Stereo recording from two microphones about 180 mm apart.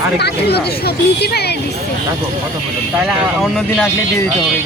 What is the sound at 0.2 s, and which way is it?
Speech, 65° left (ahead or behind).